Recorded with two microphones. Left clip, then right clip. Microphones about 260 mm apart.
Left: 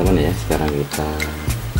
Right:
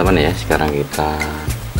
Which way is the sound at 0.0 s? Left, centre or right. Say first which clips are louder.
Right 4 dB; centre.